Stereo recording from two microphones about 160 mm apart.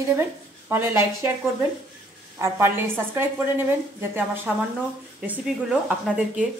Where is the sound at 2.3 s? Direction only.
15° right (ahead or behind).